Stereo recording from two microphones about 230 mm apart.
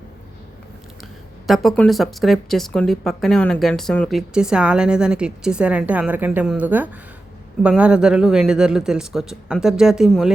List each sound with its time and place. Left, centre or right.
1.5 s speech: centre